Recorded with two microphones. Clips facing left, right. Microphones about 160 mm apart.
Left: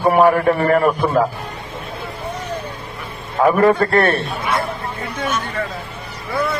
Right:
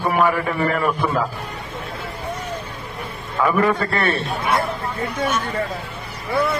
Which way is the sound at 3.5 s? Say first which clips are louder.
Left 6 dB; 45° left (ahead or behind).